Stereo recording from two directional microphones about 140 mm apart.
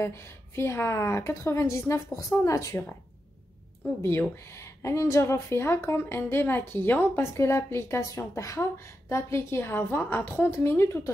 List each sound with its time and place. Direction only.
0.0 s a woman's voice: 20° left (ahead or behind)
4.0 s speech: 15° left (ahead or behind)